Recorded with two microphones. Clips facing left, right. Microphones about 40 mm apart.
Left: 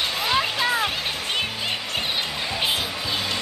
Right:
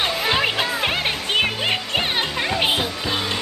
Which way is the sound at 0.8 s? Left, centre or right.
Right.